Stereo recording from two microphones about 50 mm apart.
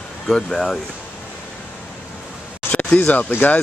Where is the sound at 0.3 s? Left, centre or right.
Centre.